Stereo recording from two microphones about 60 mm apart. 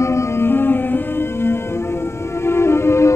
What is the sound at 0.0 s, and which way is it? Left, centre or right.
Music, left.